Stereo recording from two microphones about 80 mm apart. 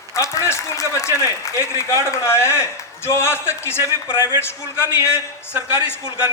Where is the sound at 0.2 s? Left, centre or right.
Left.